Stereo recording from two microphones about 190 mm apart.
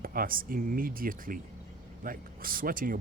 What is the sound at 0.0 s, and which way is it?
Speech, 50° right (ahead or behind).